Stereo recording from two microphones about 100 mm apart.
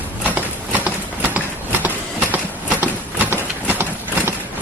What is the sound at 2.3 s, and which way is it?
Clip-clop, 15° right (ahead or behind).